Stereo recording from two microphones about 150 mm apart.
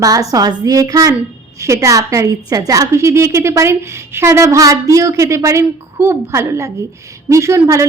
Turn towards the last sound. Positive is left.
turn(degrees=-20)  # may be behind; listen again after turning